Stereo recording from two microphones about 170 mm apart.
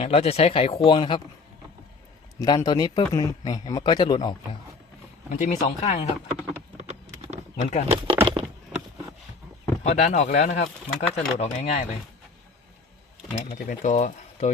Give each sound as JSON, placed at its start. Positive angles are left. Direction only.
{"t": 0.0, "sound": "speech", "side_deg": 35}
{"t": 2.4, "sound": "speech", "side_deg": 20}
{"t": 5.3, "sound": "speech", "side_deg": 45}
{"t": 6.7, "sound": "a sound", "side_deg": -40}
{"t": 7.5, "sound": "speech", "side_deg": 40}
{"t": 7.9, "sound": "a sound", "side_deg": -35}
{"t": 9.8, "sound": "speech", "side_deg": 40}
{"t": 13.3, "sound": "speech", "side_deg": 45}